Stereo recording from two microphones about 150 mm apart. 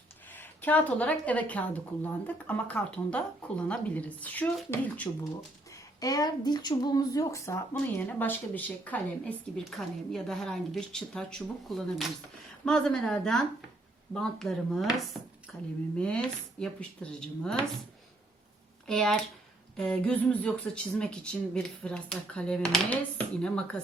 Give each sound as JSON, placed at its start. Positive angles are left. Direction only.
{"t": 0.3, "sound": "speech", "side_deg": 10}
{"t": 18.9, "sound": "speech", "side_deg": 5}